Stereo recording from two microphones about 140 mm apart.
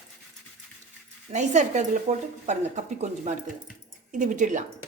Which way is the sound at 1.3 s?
60° right (ahead or behind).